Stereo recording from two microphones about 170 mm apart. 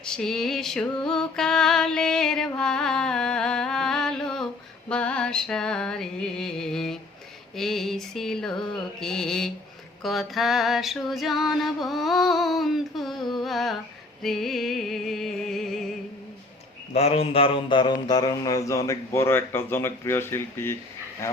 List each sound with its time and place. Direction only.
0.1 s music: 5° left (ahead or behind)
16.9 s mantra: 35° left (ahead or behind); by 20.7 s 15° left (ahead or behind)